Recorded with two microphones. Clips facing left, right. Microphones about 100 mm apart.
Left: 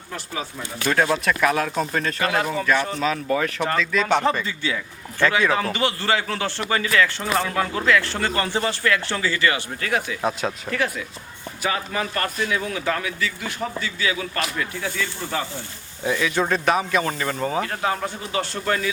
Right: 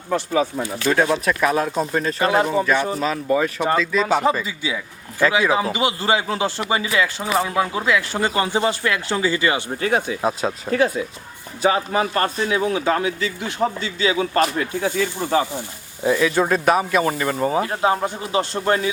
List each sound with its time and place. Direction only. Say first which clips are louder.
0.3 s speech: right 10 dB; 35° right (ahead or behind)
0.9 s speech: right 2 dB; 10° right (ahead or behind)
2.1 s a man's voice: right 7 dB; 25° right (ahead or behind)
2.7 s a man's voice: right 2 dB; 10° right (ahead or behind)
14.3 s speech: right 7 dB; 40° right (ahead or behind)
14.7 s a man's voice: right 6 dB; 20° right (ahead or behind)